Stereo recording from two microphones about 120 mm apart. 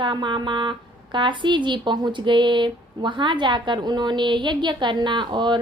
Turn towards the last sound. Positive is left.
turn(degrees=-40)  # may be behind; listen again after turning